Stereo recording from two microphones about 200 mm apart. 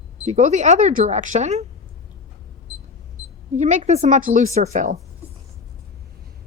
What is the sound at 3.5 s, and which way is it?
A woman's voice, 35° right (ahead or behind).